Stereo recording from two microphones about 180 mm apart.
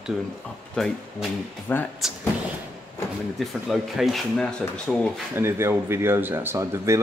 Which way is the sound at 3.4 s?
Centre (ahead or behind).